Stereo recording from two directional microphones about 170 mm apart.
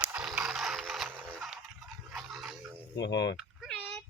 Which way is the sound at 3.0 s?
90° left.